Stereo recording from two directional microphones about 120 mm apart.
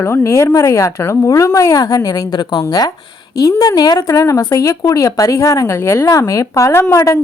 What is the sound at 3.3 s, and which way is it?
A woman's voice, 30° left (ahead or behind).